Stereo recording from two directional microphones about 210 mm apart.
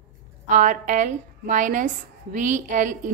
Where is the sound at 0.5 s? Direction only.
35° right (ahead or behind).